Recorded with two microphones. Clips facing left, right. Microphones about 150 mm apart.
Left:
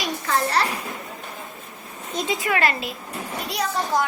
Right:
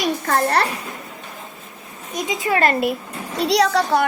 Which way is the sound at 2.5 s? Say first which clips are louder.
Right 5 dB; 40° right (ahead or behind).